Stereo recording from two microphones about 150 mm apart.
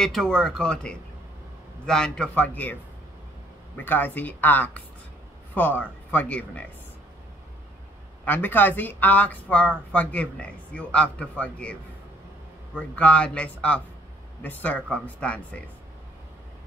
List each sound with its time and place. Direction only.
0.0 s speech: 5° left (ahead or behind)
8.3 s speech: 10° left (ahead or behind)
12.7 s speech: 10° left (ahead or behind)